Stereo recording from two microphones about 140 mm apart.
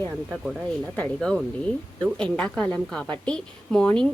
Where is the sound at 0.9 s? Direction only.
5° left (ahead or behind).